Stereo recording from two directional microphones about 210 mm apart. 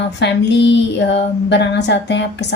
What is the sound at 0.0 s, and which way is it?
A woman's voice, 55° left (ahead or behind).